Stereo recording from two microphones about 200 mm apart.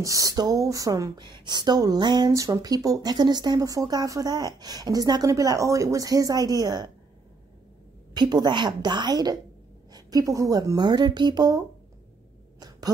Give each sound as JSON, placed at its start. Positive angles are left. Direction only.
{"t": 0.0, "sound": "speech", "side_deg": -15}
{"t": 8.1, "sound": "speech", "side_deg": -20}
{"t": 12.5, "sound": "a sound", "side_deg": -20}